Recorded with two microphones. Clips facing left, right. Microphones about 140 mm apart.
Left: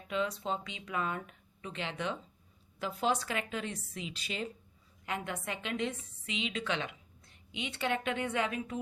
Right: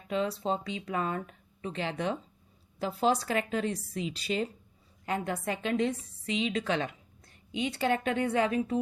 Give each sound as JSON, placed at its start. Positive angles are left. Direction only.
{"t": 0.1, "sound": "speech", "side_deg": -35}